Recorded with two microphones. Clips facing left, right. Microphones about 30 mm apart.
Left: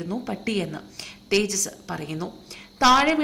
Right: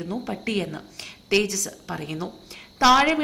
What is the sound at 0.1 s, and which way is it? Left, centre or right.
A woman's voice, centre.